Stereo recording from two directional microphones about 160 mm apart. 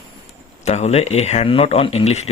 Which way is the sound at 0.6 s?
45° left (ahead or behind).